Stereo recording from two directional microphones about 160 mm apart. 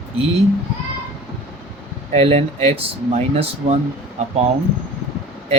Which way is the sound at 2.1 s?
40° right (ahead or behind).